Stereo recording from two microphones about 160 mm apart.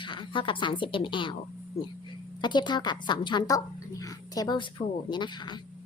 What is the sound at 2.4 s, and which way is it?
A woman's voice, 30° left (ahead or behind).